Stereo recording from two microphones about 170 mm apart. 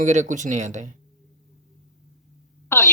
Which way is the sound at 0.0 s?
45° right (ahead or behind).